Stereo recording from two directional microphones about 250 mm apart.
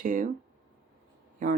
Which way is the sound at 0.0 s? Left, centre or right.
Right.